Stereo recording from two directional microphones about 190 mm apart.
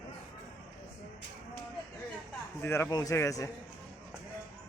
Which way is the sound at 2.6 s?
15° left (ahead or behind).